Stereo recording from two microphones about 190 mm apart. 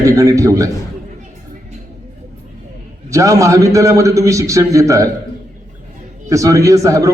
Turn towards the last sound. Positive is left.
turn(degrees=-15)  # may be behind; listen again after turning